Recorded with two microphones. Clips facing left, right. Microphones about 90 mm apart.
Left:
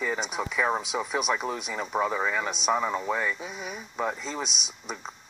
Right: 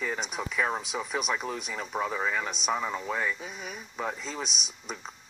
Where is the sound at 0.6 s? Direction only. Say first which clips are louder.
Left 3 dB; 10° left (ahead or behind).